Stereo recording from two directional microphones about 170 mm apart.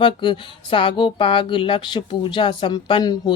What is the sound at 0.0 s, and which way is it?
Speech, 30° left (ahead or behind).